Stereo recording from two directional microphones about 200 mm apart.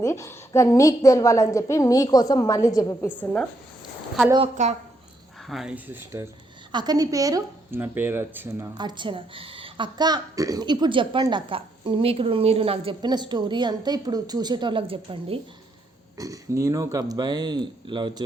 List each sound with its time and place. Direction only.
0.0 s a woman's voice: 15° left (ahead or behind)
3.2 s speech: 5° left (ahead or behind)
4.6 s speech: 35° right (ahead or behind)
5.5 s speech: 5° right (ahead or behind)
6.7 s speech: 20° right (ahead or behind)